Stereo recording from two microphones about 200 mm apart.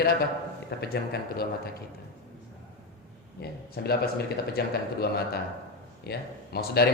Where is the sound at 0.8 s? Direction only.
50° left (ahead or behind).